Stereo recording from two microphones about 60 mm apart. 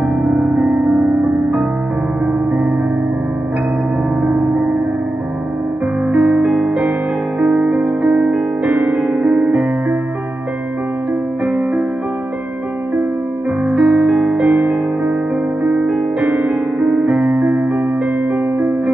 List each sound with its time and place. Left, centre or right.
4.2 s music: centre
6.1 s music: centre
11.4 s music: centre
13.7 s music: centre
14.4 s music: centre